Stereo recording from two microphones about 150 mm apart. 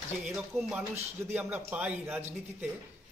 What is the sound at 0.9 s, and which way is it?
A man's voice, 15° right (ahead or behind).